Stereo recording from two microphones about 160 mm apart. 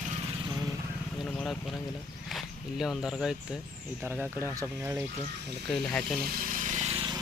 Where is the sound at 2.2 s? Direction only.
Centre (ahead or behind); by 5.0 s 20° right (ahead or behind).